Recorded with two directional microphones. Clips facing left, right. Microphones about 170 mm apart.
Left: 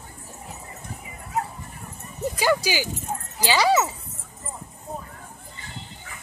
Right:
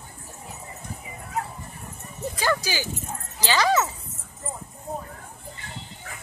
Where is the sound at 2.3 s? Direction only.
15° left (ahead or behind).